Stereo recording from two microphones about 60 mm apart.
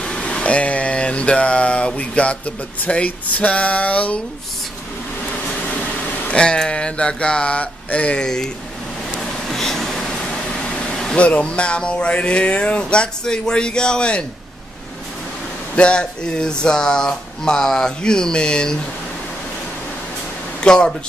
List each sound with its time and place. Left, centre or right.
0.0 s a sound: centre
5.5 s speech: left
9.2 s a sound: centre
11.1 s speech: left
15.7 s speech: centre
20.6 s speech: centre